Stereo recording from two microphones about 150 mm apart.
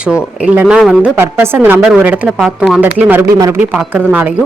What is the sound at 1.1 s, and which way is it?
Speech, 15° right (ahead or behind).